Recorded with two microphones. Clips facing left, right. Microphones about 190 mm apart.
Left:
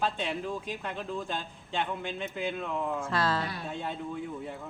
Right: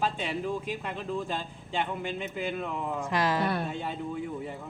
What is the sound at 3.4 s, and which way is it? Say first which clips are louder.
Speech: right 8 dB; 60° right (ahead or behind).